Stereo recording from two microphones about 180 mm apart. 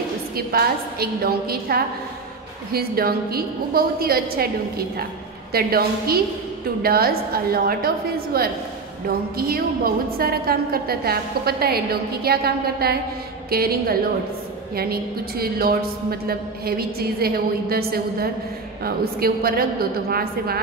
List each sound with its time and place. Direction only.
0.5 s a woman's voice: 55° right (ahead or behind)